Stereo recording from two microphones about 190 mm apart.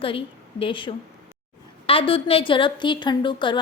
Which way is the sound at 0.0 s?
30° left (ahead or behind).